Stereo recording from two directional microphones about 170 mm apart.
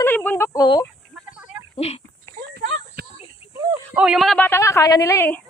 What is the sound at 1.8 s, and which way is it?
Dog, 40° left (ahead or behind).